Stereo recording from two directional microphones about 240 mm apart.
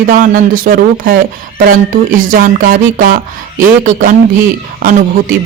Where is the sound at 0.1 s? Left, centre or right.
Right.